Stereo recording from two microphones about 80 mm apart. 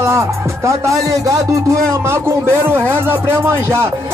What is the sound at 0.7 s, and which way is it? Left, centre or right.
Speech, right.